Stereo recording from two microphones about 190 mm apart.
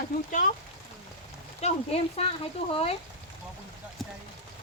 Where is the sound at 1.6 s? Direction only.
35° left (ahead or behind).